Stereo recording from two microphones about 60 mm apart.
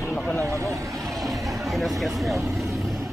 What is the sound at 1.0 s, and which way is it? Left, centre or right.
Vehicle, centre.